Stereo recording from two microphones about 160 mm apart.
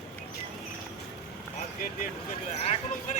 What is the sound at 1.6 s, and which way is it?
Vehicle, 60° left (ahead or behind).